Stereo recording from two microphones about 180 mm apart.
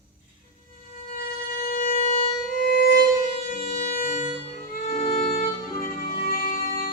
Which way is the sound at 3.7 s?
45° left (ahead or behind).